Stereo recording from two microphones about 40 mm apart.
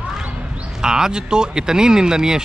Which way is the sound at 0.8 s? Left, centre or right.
Centre.